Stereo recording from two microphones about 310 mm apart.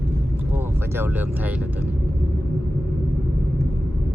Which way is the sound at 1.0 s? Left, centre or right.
Centre.